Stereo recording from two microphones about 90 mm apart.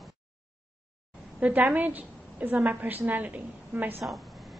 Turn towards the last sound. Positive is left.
turn(degrees=-20)  # may be behind; listen again after turning